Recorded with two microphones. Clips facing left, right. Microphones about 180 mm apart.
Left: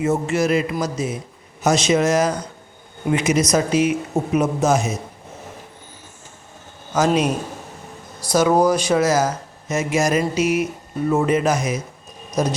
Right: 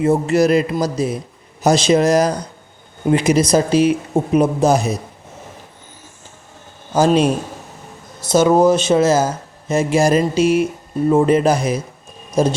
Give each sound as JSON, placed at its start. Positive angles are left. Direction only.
{"t": 0.0, "sound": "speech", "side_deg": -35}
{"t": 6.9, "sound": "speech", "side_deg": -30}